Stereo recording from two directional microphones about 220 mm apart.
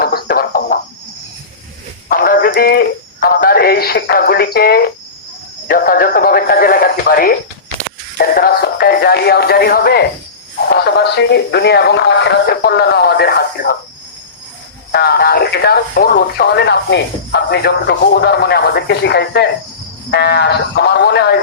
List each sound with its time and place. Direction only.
0.0 s a sound: 45° left (ahead or behind)
2.0 s a sound: 40° left (ahead or behind)
5.6 s radio: 40° left (ahead or behind)
8.2 s music: 45° left (ahead or behind)
10.8 s speech: 50° left (ahead or behind)
14.9 s speech: 45° left (ahead or behind)